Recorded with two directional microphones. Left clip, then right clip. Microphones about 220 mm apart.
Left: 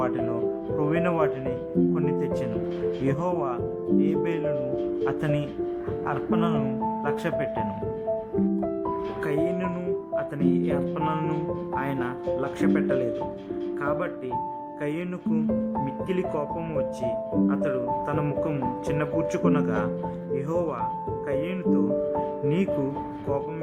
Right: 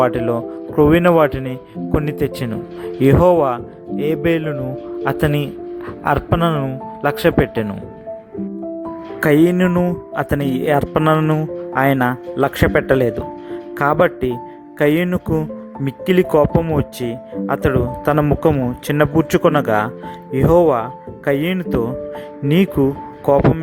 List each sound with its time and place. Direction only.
0.0 s speech: 40° right (ahead or behind)
9.2 s speech: 40° right (ahead or behind)